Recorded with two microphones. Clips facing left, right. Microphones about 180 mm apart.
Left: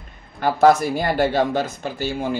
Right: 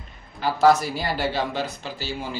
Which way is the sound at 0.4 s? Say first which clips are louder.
Left 3 dB; 55° left (ahead or behind).